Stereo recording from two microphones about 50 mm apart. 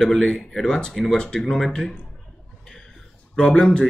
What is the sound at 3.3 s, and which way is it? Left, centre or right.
Speech, centre.